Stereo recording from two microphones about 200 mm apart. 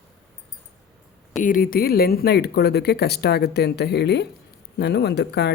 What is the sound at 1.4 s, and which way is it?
Speech, 45° left (ahead or behind).